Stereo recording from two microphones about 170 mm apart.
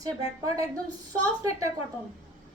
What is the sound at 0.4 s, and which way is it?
Speech, 20° right (ahead or behind).